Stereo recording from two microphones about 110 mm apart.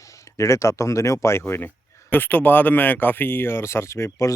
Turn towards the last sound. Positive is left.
turn(degrees=25)  # may be behind; listen again after turning